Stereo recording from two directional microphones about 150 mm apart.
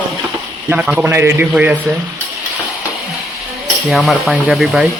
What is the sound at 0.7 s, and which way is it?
Speech, 10° right (ahead or behind).